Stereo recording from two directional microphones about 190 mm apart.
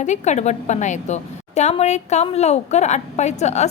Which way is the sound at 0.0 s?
40° left (ahead or behind).